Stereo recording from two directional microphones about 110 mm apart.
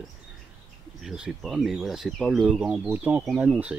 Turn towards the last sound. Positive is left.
turn(degrees=-10)  # may be behind; listen again after turning